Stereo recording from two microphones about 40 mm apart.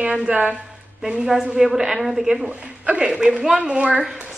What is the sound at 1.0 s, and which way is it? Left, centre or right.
A woman's voice, centre.